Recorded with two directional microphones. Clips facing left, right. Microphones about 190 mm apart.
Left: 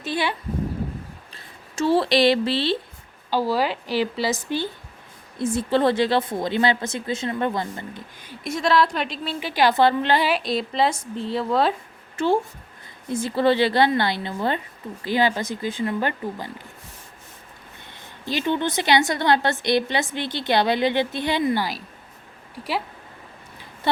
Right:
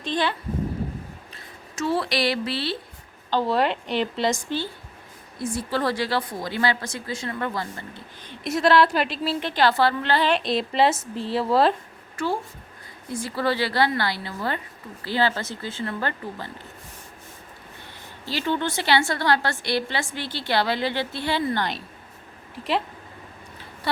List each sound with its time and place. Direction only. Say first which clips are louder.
0.0 s speech: even; 10° left (ahead or behind)
1.3 s speech: right 1 dB; 30° left (ahead or behind)
3.2 s a woman's voice: even; 5° left (ahead or behind)
4.4 s a woman's voice: left 2 dB; 15° left (ahead or behind)
8.4 s a woman's voice: right 2 dB; centre (ahead or behind)
12.1 s a woman's voice: left 6 dB; 25° left (ahead or behind)
18.3 s a woman's voice: left 2 dB; 20° left (ahead or behind)